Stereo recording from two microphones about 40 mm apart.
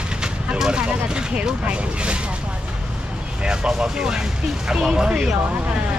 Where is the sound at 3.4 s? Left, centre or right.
Right.